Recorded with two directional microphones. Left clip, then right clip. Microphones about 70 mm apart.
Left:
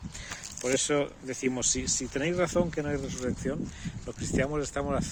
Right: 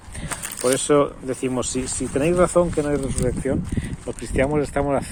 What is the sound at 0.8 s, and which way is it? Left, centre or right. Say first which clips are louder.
Speech: right 11 dB; left.